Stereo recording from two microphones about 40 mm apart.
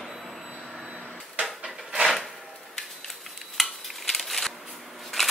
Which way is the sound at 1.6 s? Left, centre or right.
Centre.